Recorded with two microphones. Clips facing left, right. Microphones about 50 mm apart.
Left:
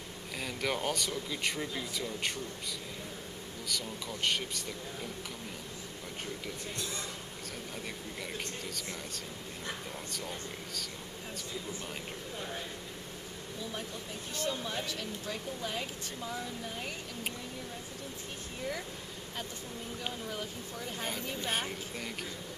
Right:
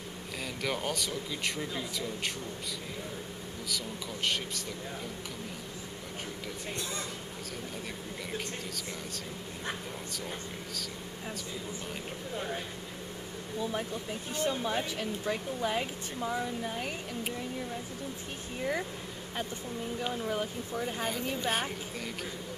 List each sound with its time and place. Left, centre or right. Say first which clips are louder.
0.4 s speech: even; centre
3.6 s speech: even; centre
6.8 s a woman's voice: right 2 dB; right
14.3 s a woman's voice: right 5 dB; right
20.1 s a woman's voice: right 6 dB; right
21.5 s speech: right 3 dB; centre